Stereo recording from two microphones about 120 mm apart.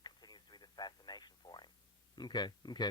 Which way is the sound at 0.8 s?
35° left (ahead or behind).